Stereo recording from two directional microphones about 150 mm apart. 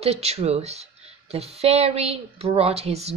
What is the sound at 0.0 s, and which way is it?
Speech, 45° right (ahead or behind).